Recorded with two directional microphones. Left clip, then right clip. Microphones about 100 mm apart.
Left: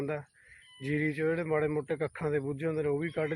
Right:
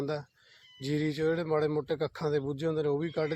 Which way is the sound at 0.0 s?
15° right (ahead or behind).